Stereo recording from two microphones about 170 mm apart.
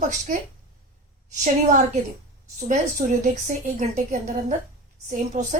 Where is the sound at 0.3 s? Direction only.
50° right (ahead or behind).